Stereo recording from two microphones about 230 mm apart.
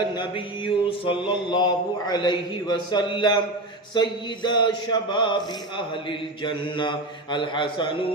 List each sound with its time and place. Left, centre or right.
0.1 s speech: left